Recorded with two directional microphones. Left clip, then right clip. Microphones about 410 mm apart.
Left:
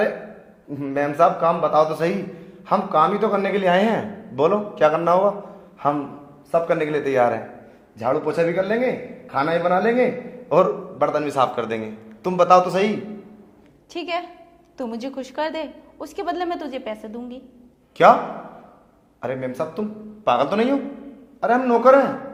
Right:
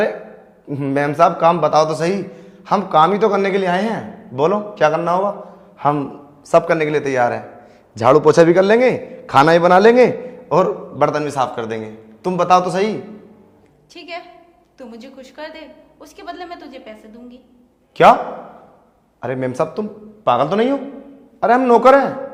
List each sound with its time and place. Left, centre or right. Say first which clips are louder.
0.7 s a man's voice: right 4 dB; right
7.9 s a man's voice: right 11 dB; right
10.5 s a man's voice: right 2 dB; centre
13.9 s a woman's voice: left 5 dB; left
18.0 s a man's voice: right 3 dB; right
19.2 s a man's voice: right 5 dB; right